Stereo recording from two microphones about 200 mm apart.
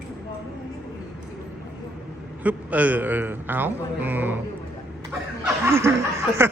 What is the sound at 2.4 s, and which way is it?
Speech, 5° right (ahead or behind).